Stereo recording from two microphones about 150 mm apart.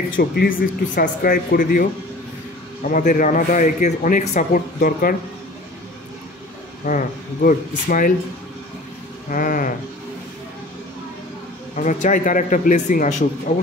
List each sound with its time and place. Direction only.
0.1 s speech: 90° left; by 1.9 s 70° left (ahead or behind)
2.8 s a man's voice: 55° left (ahead or behind)
4.7 s speech: 70° left (ahead or behind)
6.8 s a man's voice: 65° left (ahead or behind)
9.3 s a man's voice: 65° left (ahead or behind)
11.7 s a man's voice: 55° left (ahead or behind)